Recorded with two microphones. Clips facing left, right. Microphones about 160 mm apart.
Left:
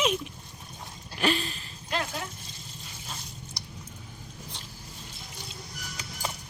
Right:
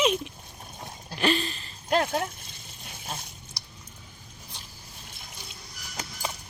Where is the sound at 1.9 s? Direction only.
50° right (ahead or behind).